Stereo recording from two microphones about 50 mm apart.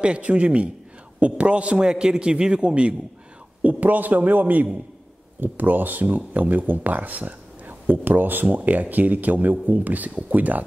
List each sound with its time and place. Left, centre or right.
0.0 s a man's voice: right
3.6 s speech: right